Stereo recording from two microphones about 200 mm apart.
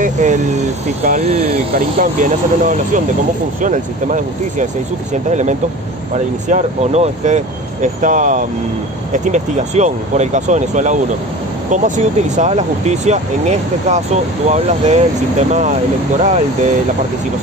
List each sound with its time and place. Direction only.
0.0 s speech: 40° right (ahead or behind)
16.2 s speech: 40° right (ahead or behind)